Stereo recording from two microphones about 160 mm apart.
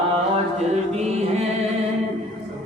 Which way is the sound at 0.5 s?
45° right (ahead or behind).